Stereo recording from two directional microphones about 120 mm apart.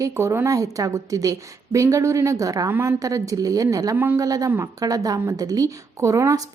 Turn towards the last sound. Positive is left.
turn(degrees=-25)  # may be behind; listen again after turning